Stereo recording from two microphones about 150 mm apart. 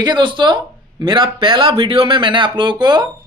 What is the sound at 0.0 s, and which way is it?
Speech, 30° right (ahead or behind).